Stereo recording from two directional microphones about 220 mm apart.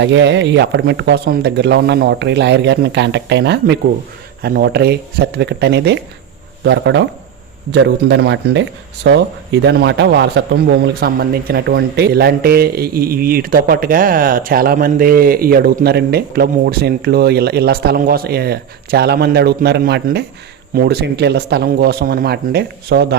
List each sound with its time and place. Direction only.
0.0 s speech: 55° right (ahead or behind)